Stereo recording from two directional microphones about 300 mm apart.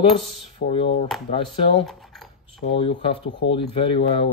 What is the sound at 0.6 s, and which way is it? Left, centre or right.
Speech, centre.